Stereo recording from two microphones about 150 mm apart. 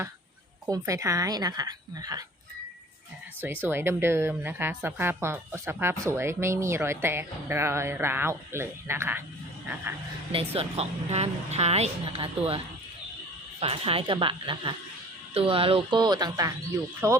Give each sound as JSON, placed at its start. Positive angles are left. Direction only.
{"t": 0.7, "sound": "a woman's voice", "side_deg": -20}
{"t": 3.4, "sound": "a woman's voice", "side_deg": -15}
{"t": 10.3, "sound": "a woman's voice", "side_deg": -40}